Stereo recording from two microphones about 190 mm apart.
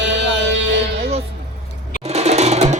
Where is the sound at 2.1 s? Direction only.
35° right (ahead or behind).